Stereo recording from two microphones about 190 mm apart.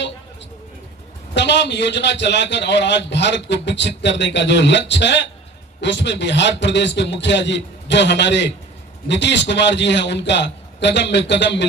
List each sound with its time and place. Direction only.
1.4 s a man's voice: 65° left (ahead or behind)